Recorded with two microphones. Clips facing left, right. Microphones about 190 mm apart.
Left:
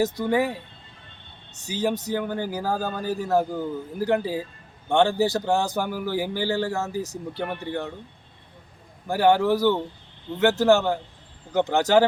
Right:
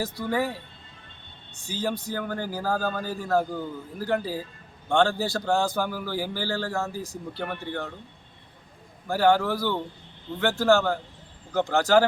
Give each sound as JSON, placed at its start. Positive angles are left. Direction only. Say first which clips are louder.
{"t": 0.0, "sound": "a man's voice", "louder": "left 5 dB", "side_deg": 20}
{"t": 1.6, "sound": "a man's voice", "louder": "left 4 dB", "side_deg": 20}
{"t": 9.0, "sound": "a man's voice", "louder": "left 2 dB", "side_deg": 15}